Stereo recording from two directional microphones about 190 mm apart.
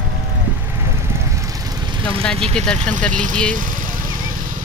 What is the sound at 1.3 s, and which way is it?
Vehicle, 15° right (ahead or behind).